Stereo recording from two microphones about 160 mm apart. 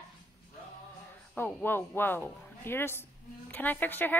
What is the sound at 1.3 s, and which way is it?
Speech, 15° left (ahead or behind).